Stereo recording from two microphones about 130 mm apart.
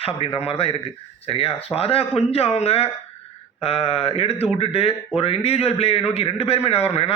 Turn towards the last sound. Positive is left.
turn(degrees=50)  # may be behind; listen again after turning